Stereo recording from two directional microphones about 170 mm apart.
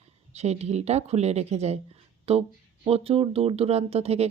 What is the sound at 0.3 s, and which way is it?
Speech, 40° right (ahead or behind).